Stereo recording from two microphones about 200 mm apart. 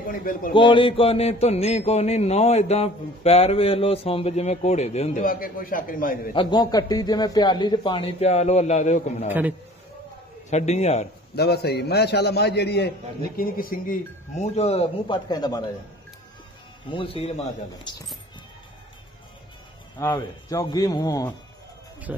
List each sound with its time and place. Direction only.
0.0 s speech: 45° left (ahead or behind)
0.5 s speech: 25° left (ahead or behind); by 6.3 s 45° left (ahead or behind)
6.3 s a man's voice: 20° left (ahead or behind)
10.5 s speech: 35° left (ahead or behind)
11.3 s a man's voice: 55° left (ahead or behind); by 15.6 s 20° left (ahead or behind)
16.9 s a man's voice: 25° left (ahead or behind)
20.0 s a man's voice: 15° left (ahead or behind)